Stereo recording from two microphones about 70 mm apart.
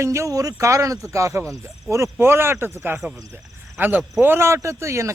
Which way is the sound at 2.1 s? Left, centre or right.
Right.